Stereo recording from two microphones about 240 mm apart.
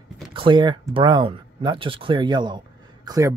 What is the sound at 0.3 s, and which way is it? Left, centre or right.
Speech, centre.